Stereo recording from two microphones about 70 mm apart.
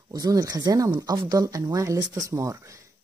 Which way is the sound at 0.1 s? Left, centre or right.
Right.